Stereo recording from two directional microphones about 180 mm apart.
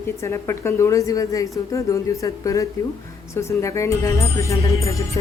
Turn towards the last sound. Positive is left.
turn(degrees=15)  # may be behind; listen again after turning